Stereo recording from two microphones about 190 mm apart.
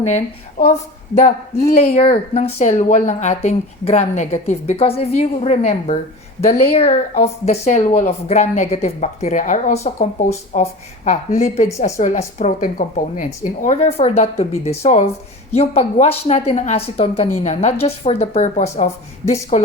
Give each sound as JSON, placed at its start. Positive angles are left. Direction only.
{"t": 0.6, "sound": "speech", "side_deg": 40}